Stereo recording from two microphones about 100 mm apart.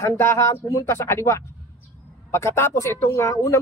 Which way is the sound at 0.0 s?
30° left (ahead or behind).